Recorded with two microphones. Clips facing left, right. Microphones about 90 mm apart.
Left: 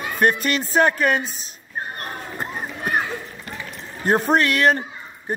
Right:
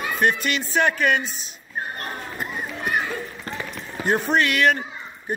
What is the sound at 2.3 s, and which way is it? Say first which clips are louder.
Run: left 2 dB; 35° left (ahead or behind).